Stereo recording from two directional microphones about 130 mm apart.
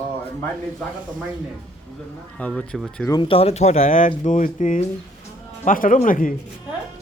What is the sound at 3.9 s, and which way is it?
Speech, 85° left.